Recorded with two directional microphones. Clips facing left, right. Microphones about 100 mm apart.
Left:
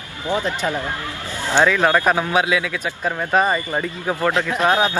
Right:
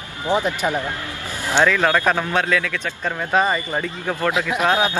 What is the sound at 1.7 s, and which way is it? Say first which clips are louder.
Speech: left 1 dB; 10° left (ahead or behind).